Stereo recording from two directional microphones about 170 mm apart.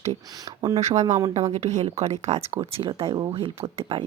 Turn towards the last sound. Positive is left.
turn(degrees=-30)  # may be behind; listen again after turning